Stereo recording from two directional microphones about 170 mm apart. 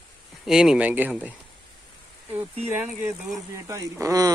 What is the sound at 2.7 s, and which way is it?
Speech, 10° right (ahead or behind).